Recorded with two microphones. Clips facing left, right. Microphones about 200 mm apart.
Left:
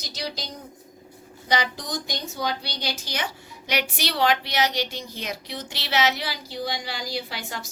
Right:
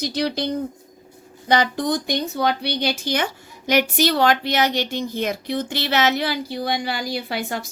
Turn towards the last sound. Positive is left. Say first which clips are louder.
# right 6 dB
turn(degrees=-55)  # may be behind; listen again after turning